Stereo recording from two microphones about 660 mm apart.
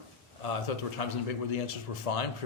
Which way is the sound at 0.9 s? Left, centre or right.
Left.